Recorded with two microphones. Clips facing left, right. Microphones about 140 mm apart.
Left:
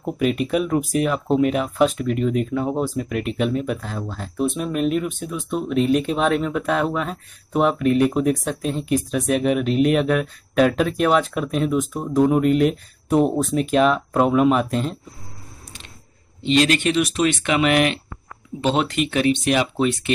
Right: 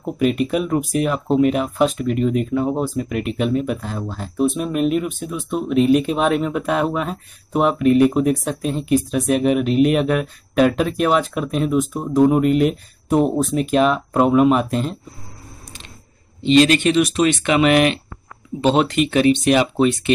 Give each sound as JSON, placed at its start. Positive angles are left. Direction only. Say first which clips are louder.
{"t": 0.0, "sound": "speech", "louder": "right 2 dB", "side_deg": 0}
{"t": 16.4, "sound": "speech", "louder": "right 4 dB", "side_deg": 5}
{"t": 18.6, "sound": "speech", "louder": "right 4 dB", "side_deg": -40}
{"t": 18.9, "sound": "speech", "louder": "right 4 dB", "side_deg": 0}